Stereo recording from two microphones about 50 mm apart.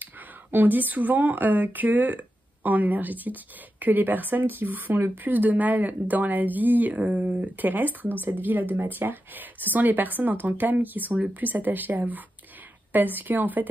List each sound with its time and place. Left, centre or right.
0.0 s a woman's voice: right